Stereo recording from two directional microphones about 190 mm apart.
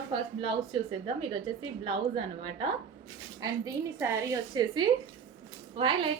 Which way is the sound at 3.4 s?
15° right (ahead or behind).